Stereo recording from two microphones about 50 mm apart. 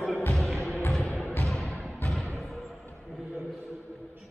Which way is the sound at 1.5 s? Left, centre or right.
Centre.